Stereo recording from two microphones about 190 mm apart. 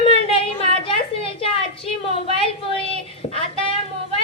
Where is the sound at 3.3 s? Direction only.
30° left (ahead or behind).